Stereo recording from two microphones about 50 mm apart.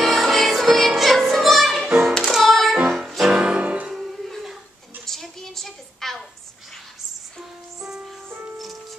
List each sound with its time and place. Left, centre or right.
0.0 s music: centre
3.3 s music: right
3.9 s music: centre
4.3 s a sound: centre
7.3 s music: centre